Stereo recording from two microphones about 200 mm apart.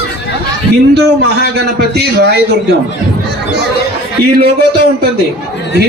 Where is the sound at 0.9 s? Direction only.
55° right (ahead or behind).